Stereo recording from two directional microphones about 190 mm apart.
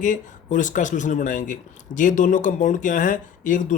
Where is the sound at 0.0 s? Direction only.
40° left (ahead or behind).